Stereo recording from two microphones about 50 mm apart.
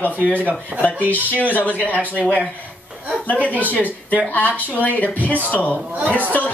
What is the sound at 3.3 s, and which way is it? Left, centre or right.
Speech, left.